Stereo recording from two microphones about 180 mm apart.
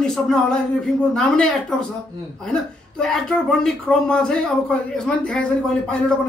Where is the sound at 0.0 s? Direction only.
5° left (ahead or behind).